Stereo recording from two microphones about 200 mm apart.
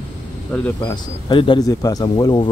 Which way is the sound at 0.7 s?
20° left (ahead or behind).